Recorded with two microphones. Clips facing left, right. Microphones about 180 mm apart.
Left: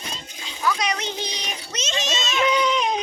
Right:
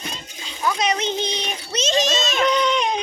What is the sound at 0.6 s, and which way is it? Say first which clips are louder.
A child's voice: right 3 dB; 25° right (ahead or behind).